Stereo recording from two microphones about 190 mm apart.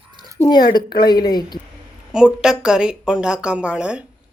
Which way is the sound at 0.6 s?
50° left (ahead or behind).